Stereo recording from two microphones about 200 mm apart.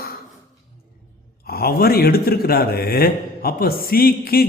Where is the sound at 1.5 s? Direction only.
50° left (ahead or behind).